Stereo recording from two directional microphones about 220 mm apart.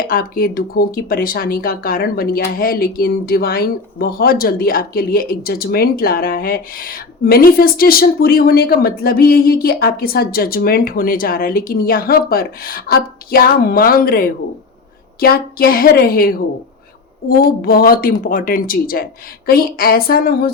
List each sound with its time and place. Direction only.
0.0 s a woman's voice: 40° left (ahead or behind)
17.6 s a woman's voice: 40° left (ahead or behind)